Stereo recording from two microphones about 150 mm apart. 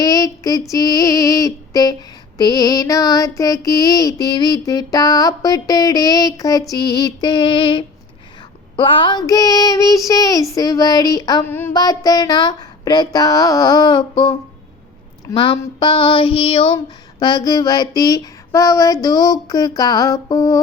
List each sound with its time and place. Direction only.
0.0 s female singing: 25° left (ahead or behind)
0.7 s music: 25° left (ahead or behind)
11.4 s a sound: 15° left (ahead or behind)
11.7 s music: 25° left (ahead or behind)
15.3 s female singing: 30° left (ahead or behind)
16.7 s music: 30° left (ahead or behind)